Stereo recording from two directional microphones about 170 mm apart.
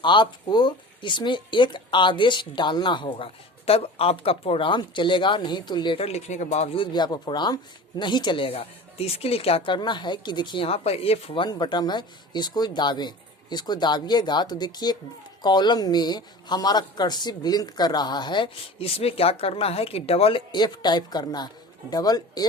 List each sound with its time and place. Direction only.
0.0 s speech: 25° left (ahead or behind)
6.9 s speech: 25° left (ahead or behind)